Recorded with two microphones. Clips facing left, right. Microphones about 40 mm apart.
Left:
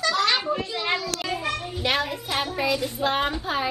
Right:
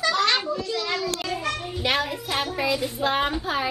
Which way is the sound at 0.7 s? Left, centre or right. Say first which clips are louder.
Even; left.